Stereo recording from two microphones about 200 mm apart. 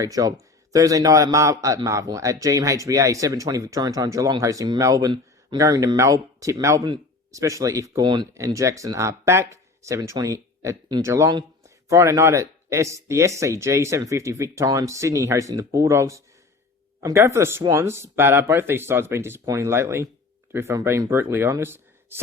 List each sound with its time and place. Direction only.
0.0 s a man's voice: 20° right (ahead or behind)